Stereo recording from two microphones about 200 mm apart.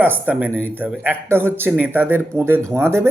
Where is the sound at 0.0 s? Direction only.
10° right (ahead or behind).